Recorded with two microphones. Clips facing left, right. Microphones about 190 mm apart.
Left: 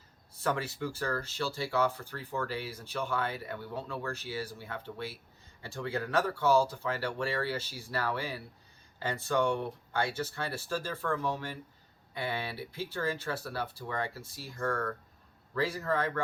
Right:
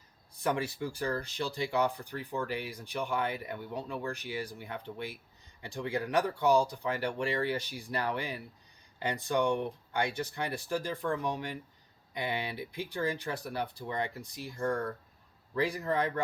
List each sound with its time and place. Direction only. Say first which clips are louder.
0.3 s speech: right 1 dB; 15° right (ahead or behind)